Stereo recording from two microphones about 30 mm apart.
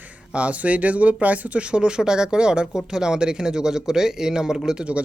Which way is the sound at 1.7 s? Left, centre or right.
Right.